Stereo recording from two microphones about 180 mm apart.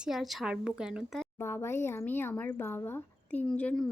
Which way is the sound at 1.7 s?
15° left (ahead or behind).